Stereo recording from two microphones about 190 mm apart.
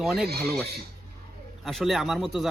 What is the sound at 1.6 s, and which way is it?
Speech, centre (ahead or behind).